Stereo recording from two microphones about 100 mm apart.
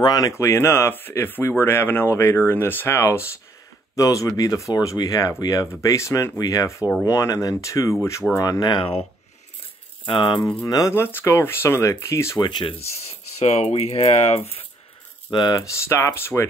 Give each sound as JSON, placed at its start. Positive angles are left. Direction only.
{"t": 0.0, "sound": "speech", "side_deg": 45}
{"t": 0.3, "sound": "speech", "side_deg": 30}
{"t": 8.4, "sound": "speech", "side_deg": 40}
{"t": 10.0, "sound": "speech", "side_deg": 55}
{"t": 10.6, "sound": "speech", "side_deg": 40}
{"t": 10.9, "sound": "speech", "side_deg": 20}
{"t": 12.4, "sound": "speech", "side_deg": 50}
{"t": 12.7, "sound": "speech", "side_deg": 90}
{"t": 15.3, "sound": "speech", "side_deg": 50}
{"t": 15.6, "sound": "speech", "side_deg": 30}